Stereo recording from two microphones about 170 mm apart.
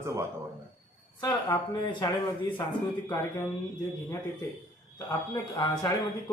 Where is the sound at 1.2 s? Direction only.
20° left (ahead or behind).